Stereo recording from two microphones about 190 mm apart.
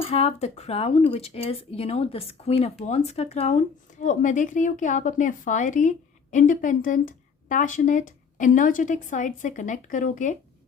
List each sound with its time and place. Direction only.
0.1 s speech: 35° left (ahead or behind)